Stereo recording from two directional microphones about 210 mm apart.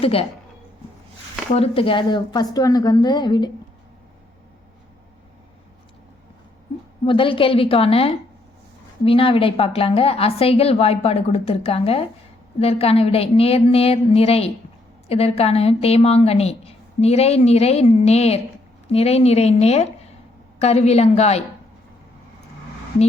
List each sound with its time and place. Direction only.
0.0 s a woman's voice: 25° left (ahead or behind)
1.5 s a woman's voice: 25° left (ahead or behind)
7.0 s a woman's voice: 25° left (ahead or behind)